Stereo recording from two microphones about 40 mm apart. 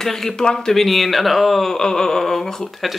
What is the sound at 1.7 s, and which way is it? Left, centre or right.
Speech, centre.